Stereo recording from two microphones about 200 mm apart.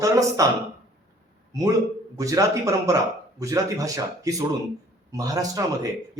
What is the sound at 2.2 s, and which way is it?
A man's voice, 15° right (ahead or behind).